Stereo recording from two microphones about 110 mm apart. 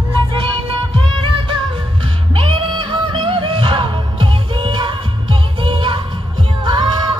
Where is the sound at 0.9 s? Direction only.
50° right (ahead or behind).